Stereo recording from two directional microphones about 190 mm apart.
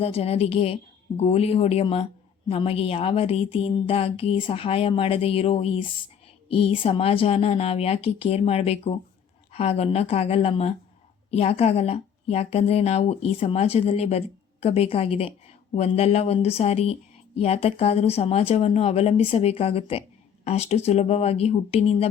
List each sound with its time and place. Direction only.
0.0 s speech: 30° left (ahead or behind)